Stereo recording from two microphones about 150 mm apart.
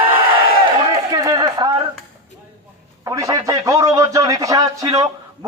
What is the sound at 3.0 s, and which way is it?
A man's voice, 20° right (ahead or behind).